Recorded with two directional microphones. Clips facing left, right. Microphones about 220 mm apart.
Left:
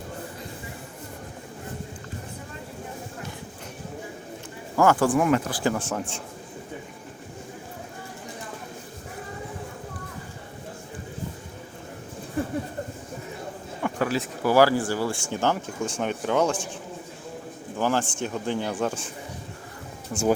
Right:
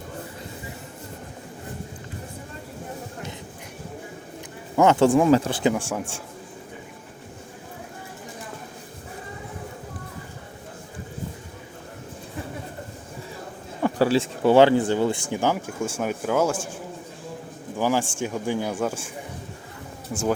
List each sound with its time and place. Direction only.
4.8 s speech: 20° right (ahead or behind)
5.7 s speech: 10° right (ahead or behind)
13.8 s speech: 30° right (ahead or behind); by 16.6 s 5° right (ahead or behind)
17.7 s speech: 10° right (ahead or behind)